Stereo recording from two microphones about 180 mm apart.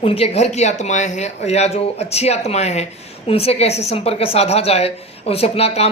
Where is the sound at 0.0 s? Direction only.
30° left (ahead or behind).